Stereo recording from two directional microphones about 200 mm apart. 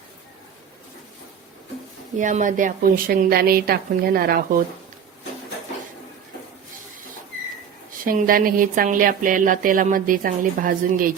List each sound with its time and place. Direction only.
2.1 s speech: 40° right (ahead or behind)
8.0 s speech: 45° right (ahead or behind)